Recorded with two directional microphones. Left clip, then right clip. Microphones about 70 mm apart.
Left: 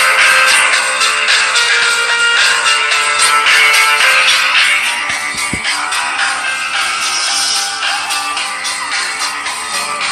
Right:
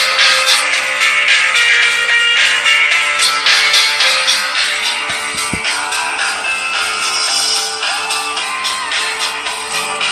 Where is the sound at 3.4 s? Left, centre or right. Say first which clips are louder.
Left 1 dB; right.